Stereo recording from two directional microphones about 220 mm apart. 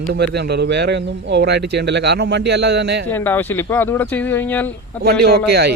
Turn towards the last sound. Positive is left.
turn(degrees=-45)  # may be behind; listen again after turning